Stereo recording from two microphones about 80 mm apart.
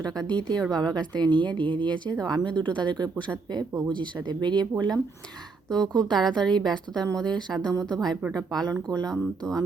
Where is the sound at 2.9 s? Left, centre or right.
Right.